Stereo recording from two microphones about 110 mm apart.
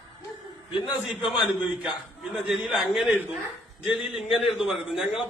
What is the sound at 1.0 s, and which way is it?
A man's voice, centre (ahead or behind).